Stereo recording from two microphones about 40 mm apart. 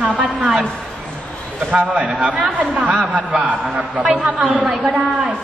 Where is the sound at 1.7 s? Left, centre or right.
Right.